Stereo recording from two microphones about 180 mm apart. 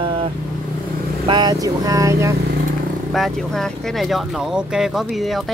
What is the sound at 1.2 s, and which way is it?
Speech, 25° right (ahead or behind).